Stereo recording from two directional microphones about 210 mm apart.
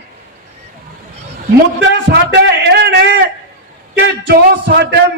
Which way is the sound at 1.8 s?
55° right (ahead or behind).